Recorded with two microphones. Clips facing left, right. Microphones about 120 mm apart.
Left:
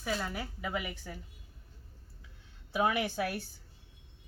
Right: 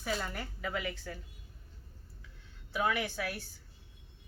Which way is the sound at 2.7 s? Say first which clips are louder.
Left 3 dB; 25° left (ahead or behind).